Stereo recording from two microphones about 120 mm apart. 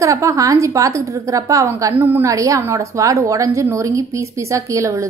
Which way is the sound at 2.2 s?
25° right (ahead or behind).